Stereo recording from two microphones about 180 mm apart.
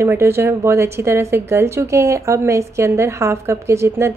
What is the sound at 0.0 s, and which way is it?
A woman's voice, 15° right (ahead or behind).